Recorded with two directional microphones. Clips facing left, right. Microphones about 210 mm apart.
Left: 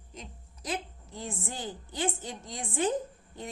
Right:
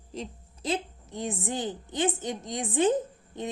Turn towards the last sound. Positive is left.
turn(degrees=-20)  # may be behind; listen again after turning